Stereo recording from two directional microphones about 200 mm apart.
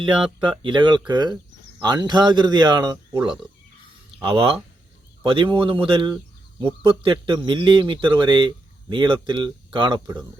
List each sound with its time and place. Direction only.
0.4 s a man's voice: 25° right (ahead or behind)